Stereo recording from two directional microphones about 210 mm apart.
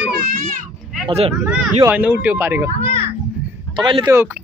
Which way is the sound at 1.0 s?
30° right (ahead or behind).